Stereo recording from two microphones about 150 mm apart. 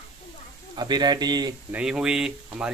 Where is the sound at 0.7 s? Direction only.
30° right (ahead or behind).